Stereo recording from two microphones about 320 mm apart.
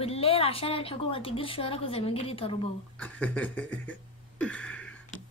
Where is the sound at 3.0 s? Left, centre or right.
Centre.